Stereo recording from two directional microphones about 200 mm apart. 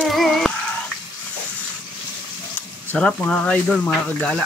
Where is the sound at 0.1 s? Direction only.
Centre (ahead or behind).